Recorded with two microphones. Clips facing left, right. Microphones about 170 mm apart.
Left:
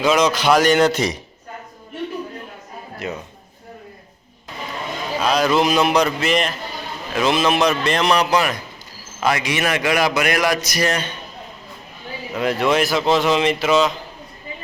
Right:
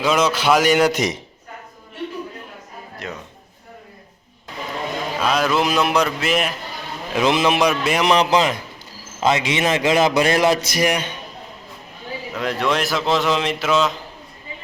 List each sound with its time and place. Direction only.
0.0 s a man's voice: 5° right (ahead or behind)
3.0 s a man's voice: 5° left (ahead or behind)
5.2 s a man's voice: centre (ahead or behind)
7.1 s a man's voice: 20° right (ahead or behind)
8.1 s a man's voice: 20° right (ahead or behind)
10.8 s a man's voice: 15° right (ahead or behind)
12.3 s a man's voice: 5° left (ahead or behind)